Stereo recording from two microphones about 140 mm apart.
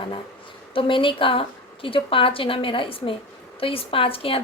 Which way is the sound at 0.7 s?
40° left (ahead or behind).